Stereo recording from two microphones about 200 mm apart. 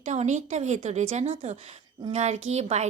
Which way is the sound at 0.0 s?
35° right (ahead or behind).